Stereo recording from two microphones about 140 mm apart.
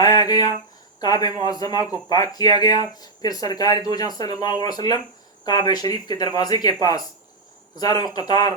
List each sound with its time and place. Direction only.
0.0 s a sound: 30° left (ahead or behind)
1.0 s speech: 25° left (ahead or behind)
7.8 s speech: 30° left (ahead or behind)